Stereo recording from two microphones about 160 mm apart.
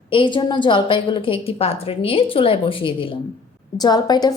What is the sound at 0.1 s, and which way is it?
A woman's voice, 30° left (ahead or behind).